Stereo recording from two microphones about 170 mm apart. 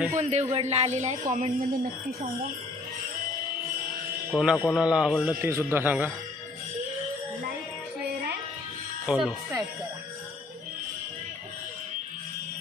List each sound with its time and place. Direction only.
0.2 s speech: 40° right (ahead or behind)
4.3 s a man's voice: 5° right (ahead or behind)
9.0 s speech: 5° right (ahead or behind)